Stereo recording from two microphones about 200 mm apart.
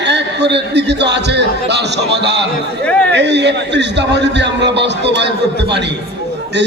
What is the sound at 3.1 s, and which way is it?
A man's voice, 60° right (ahead or behind).